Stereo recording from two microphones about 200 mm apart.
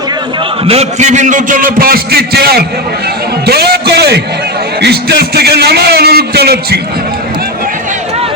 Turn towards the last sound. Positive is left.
turn(degrees=-55)  # may be behind; listen again after turning